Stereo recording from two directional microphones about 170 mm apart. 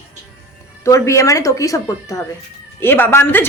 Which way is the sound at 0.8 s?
20° left (ahead or behind).